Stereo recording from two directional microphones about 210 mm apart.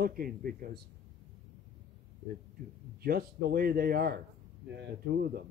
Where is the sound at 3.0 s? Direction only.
45° right (ahead or behind).